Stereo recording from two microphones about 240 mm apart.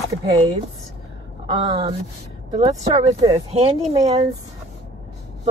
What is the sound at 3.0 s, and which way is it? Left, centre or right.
Speech, right.